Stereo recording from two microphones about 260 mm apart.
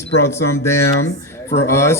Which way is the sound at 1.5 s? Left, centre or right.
Left.